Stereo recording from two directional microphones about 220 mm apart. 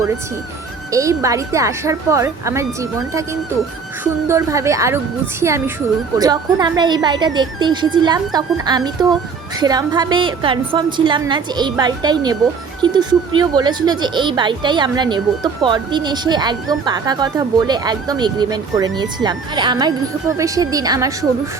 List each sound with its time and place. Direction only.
0.9 s a woman's voice: 15° right (ahead or behind)
4.0 s a woman's voice: 15° right (ahead or behind)